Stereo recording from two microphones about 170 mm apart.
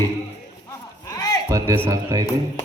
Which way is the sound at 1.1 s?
20° left (ahead or behind).